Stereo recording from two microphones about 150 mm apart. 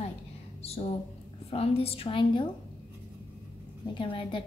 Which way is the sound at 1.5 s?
40° left (ahead or behind).